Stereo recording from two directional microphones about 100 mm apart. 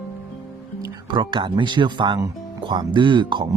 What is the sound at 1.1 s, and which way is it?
Speech, 55° right (ahead or behind).